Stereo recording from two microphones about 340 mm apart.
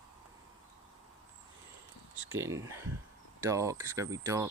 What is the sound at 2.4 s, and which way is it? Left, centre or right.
Speech, centre.